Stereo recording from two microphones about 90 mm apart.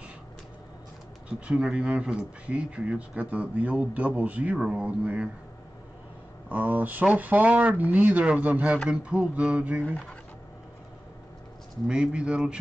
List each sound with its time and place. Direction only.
1.5 s speech: 10° right (ahead or behind)
6.5 s speech: 15° right (ahead or behind)
11.9 s speech: 10° right (ahead or behind)